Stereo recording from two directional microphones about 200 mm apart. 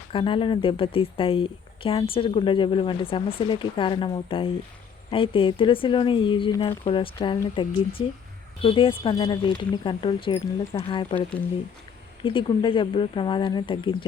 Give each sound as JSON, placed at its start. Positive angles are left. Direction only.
{"t": 0.1, "sound": "a woman's voice", "side_deg": 25}
{"t": 12.2, "sound": "a woman's voice", "side_deg": 25}